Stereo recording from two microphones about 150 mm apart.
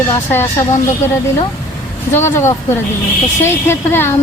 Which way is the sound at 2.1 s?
15° left (ahead or behind).